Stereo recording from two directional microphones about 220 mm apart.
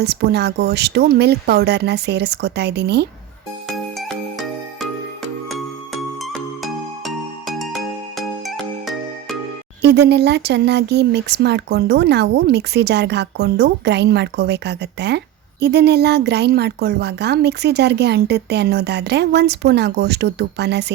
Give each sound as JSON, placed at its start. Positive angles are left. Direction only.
{"t": 0.0, "sound": "speech", "side_deg": -50}
{"t": 3.9, "sound": "music", "side_deg": 0}
{"t": 6.1, "sound": "music", "side_deg": 0}
{"t": 9.8, "sound": "speech", "side_deg": -50}